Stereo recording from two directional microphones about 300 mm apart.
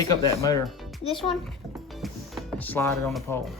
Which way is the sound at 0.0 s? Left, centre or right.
Centre.